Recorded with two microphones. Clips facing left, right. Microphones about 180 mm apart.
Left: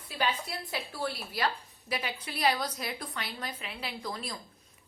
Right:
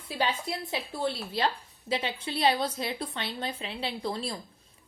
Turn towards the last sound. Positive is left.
turn(degrees=-30)  # may be behind; listen again after turning